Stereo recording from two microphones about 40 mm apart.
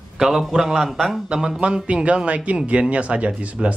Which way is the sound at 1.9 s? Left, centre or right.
Right.